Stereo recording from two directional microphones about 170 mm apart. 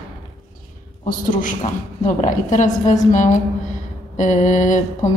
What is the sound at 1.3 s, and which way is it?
A woman's voice, 50° left (ahead or behind).